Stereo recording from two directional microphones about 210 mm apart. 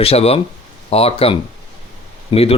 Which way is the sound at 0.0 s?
30° left (ahead or behind).